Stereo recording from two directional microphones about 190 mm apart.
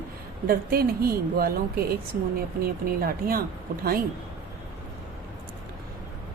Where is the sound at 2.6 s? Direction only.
50° right (ahead or behind).